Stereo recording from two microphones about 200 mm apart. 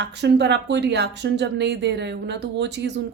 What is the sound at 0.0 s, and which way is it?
Speech, 60° right (ahead or behind).